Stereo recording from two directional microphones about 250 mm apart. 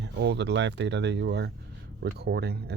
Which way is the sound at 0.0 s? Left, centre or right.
Right.